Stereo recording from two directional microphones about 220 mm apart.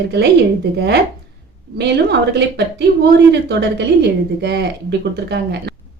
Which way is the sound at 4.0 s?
50° right (ahead or behind).